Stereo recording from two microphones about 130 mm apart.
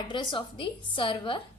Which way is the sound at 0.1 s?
40° left (ahead or behind).